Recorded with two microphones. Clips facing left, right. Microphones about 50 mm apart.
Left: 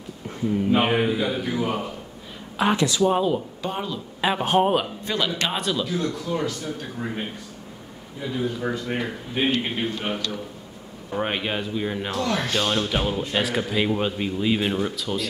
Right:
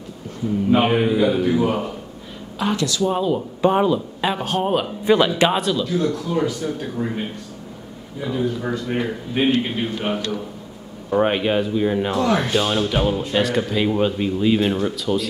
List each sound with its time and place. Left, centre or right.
0.7 s speech: centre
2.6 s speech: left
3.0 s speech: centre
3.6 s speech: right
4.2 s speech: centre
5.0 s speech: right
5.6 s speech: centre
8.2 s speech: centre